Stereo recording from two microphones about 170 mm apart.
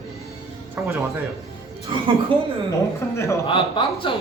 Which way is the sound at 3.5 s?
30° left (ahead or behind).